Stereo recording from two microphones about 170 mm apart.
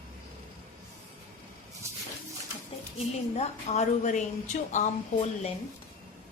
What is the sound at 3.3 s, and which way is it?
A woman's voice, 40° left (ahead or behind).